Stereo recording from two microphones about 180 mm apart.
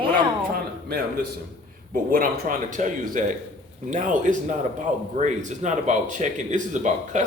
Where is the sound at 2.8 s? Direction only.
45° right (ahead or behind).